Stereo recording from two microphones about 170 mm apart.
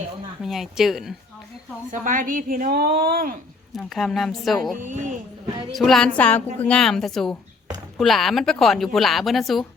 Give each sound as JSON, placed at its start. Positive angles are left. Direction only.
{"t": 0.4, "sound": "speech", "side_deg": 0}
{"t": 1.9, "sound": "a woman's voice", "side_deg": -50}
{"t": 3.7, "sound": "speech", "side_deg": 0}
{"t": 4.8, "sound": "speech", "side_deg": -45}
{"t": 5.7, "sound": "speech", "side_deg": 0}